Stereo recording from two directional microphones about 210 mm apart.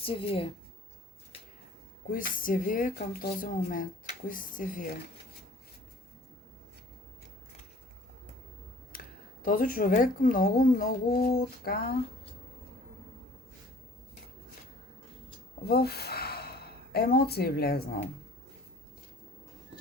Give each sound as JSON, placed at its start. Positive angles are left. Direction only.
{"t": 0.0, "sound": "a woman's voice", "side_deg": 25}
{"t": 2.0, "sound": "a woman's voice", "side_deg": 40}
{"t": 8.9, "sound": "a sound", "side_deg": 40}
{"t": 9.4, "sound": "speech", "side_deg": 40}
{"t": 15.6, "sound": "speech", "side_deg": 50}